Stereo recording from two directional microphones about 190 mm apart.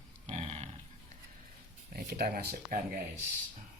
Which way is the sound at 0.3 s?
35° right (ahead or behind).